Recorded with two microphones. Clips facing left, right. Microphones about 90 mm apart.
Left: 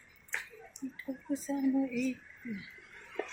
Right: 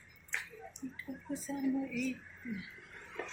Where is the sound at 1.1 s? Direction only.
15° left (ahead or behind).